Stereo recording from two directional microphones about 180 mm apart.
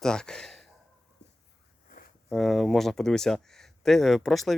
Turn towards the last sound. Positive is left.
turn(degrees=0)  # may be behind; listen again after turning